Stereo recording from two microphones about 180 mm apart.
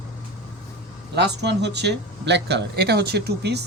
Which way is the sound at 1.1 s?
70° right (ahead or behind).